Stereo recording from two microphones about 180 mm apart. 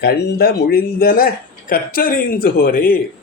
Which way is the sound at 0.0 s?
60° left (ahead or behind).